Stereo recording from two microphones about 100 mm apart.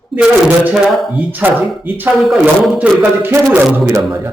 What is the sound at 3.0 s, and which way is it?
Speech, 20° right (ahead or behind).